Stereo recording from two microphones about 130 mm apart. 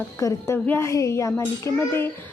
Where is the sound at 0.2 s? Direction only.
25° left (ahead or behind).